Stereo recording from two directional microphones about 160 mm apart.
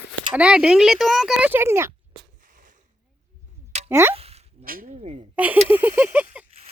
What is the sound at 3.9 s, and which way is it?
Speech, 15° right (ahead or behind).